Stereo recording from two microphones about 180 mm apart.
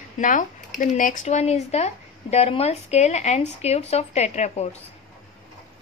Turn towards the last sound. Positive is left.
turn(degrees=35)  # may be behind; listen again after turning